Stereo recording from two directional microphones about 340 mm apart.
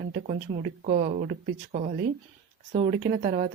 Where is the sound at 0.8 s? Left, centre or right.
Right.